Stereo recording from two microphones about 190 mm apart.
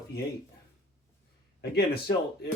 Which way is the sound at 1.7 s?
60° left (ahead or behind).